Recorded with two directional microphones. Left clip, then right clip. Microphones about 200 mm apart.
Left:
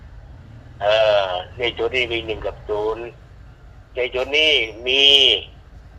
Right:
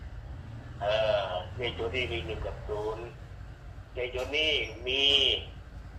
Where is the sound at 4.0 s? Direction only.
60° left (ahead or behind).